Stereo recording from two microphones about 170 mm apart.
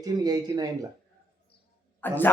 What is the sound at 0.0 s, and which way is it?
Speech, 25° right (ahead or behind).